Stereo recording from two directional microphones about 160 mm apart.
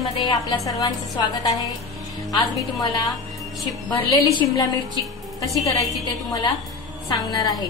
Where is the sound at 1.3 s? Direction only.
25° left (ahead or behind).